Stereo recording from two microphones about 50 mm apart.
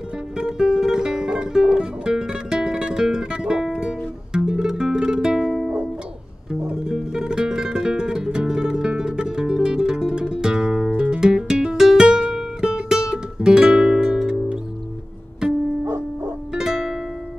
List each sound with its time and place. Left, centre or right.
0.4 s music: centre
6.6 s music: centre
16.5 s music: centre